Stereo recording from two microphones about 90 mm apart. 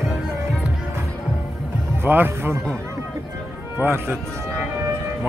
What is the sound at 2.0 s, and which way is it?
Music, 25° right (ahead or behind).